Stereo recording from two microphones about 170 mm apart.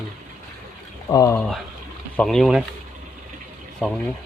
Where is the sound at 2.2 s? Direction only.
Centre (ahead or behind).